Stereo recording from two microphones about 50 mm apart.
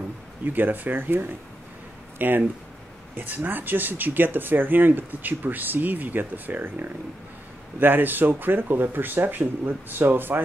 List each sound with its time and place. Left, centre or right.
0.5 s speech: right